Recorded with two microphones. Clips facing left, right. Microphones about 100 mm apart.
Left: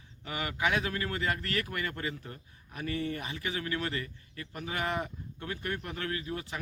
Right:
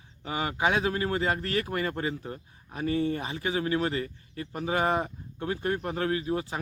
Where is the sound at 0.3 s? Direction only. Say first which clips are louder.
Right 4 dB; 25° right (ahead or behind).